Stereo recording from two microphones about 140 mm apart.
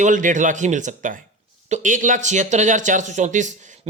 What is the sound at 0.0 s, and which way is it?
Speech, 65° right (ahead or behind).